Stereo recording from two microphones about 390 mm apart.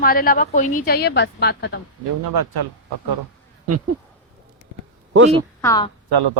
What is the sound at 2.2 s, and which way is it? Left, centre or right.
Speech, right.